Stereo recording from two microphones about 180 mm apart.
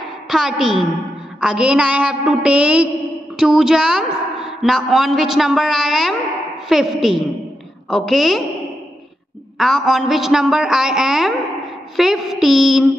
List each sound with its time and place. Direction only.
0.3 s a woman's voice: centre (ahead or behind)
9.6 s a woman's voice: centre (ahead or behind)